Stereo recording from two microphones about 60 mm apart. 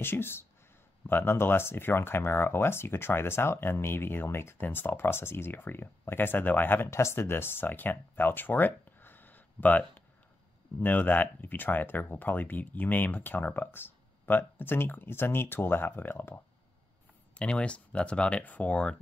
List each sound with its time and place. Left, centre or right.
0.0 s speech: left
6.9 s speech: left
17.4 s speech: centre